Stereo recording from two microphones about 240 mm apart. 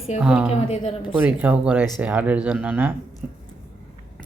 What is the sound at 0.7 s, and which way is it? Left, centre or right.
Speech, left.